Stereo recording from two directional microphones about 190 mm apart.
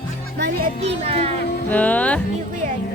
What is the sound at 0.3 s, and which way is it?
Speech, 60° right (ahead or behind).